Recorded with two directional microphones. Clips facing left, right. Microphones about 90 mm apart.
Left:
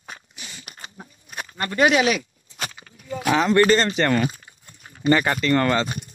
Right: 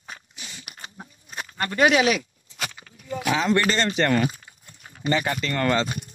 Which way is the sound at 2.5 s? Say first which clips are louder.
Even; 35° left (ahead or behind).